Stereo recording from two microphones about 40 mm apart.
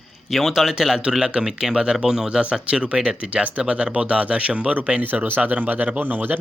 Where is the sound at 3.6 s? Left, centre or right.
Right.